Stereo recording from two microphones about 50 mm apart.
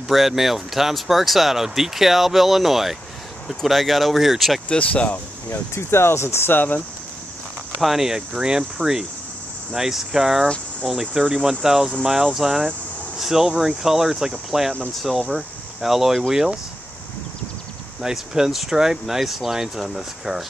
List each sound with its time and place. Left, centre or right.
0.1 s speech: centre
4.6 s speech: left
5.5 s speech: left
7.8 s speech: centre
15.0 s speech: centre
18.0 s speech: centre